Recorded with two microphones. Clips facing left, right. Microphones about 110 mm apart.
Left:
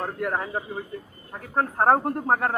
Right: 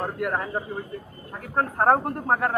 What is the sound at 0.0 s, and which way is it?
Speech, 5° right (ahead or behind).